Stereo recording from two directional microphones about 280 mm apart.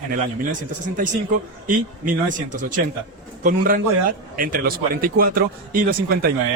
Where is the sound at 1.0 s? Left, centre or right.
Right.